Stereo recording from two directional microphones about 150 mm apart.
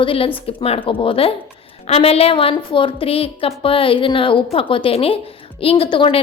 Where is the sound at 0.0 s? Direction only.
35° left (ahead or behind).